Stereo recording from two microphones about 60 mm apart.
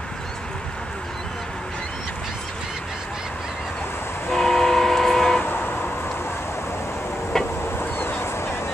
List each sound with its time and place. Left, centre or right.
4.3 s train: centre
5.4 s vehicle: left
7.3 s vehicle: centre
7.7 s vehicle: left